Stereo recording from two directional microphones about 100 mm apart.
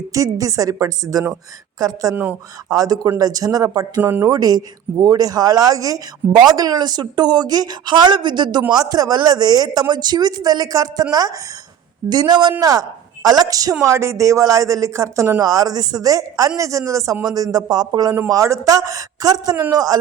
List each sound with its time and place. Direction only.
0.1 s speech: 35° right (ahead or behind)
12.0 s speech: 45° right (ahead or behind)
18.3 s speech: 30° right (ahead or behind)